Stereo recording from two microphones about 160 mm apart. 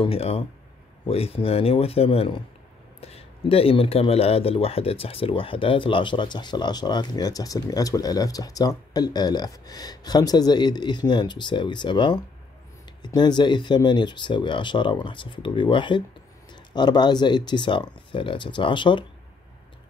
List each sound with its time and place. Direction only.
0.0 s speech: 40° left (ahead or behind)